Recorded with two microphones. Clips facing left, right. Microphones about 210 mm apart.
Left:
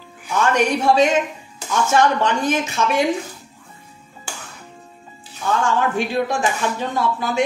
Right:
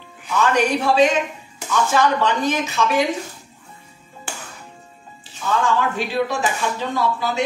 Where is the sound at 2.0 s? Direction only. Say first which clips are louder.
Left 2 dB; 50° left (ahead or behind).